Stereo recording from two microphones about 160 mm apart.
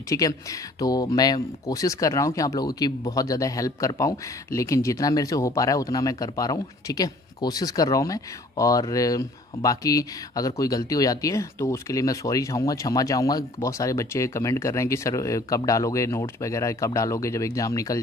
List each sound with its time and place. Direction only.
0.1 s speech: 20° left (ahead or behind)